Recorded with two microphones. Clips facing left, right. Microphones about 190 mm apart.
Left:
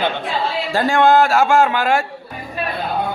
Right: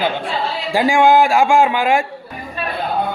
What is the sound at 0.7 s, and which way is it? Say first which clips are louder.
A man's voice: right 1 dB; 15° right (ahead or behind).